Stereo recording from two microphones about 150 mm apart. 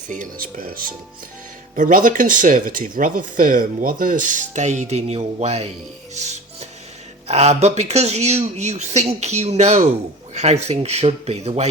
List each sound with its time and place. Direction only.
0.1 s speech: 65° right (ahead or behind); by 5.6 s 45° right (ahead or behind)
6.1 s music: 50° right (ahead or behind)
7.3 s speech: 45° right (ahead or behind)